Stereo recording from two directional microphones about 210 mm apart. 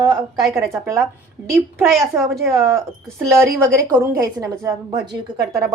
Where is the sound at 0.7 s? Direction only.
10° right (ahead or behind).